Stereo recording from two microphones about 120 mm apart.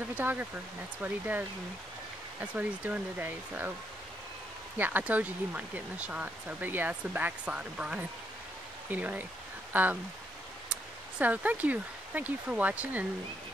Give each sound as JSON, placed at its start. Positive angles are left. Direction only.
{"t": 0.1, "sound": "speech", "side_deg": -15}
{"t": 2.4, "sound": "speech", "side_deg": -10}
{"t": 4.7, "sound": "speech", "side_deg": -15}